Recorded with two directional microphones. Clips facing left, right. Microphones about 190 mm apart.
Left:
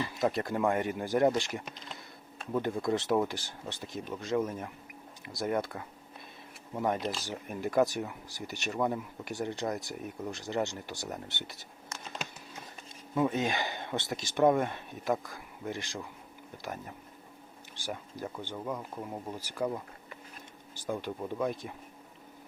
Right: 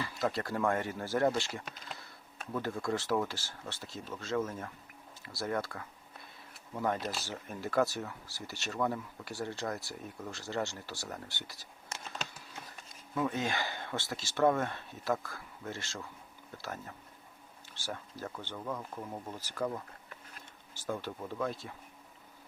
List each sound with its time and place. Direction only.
0.0 s speech: 20° left (ahead or behind)
13.1 s speech: 20° left (ahead or behind)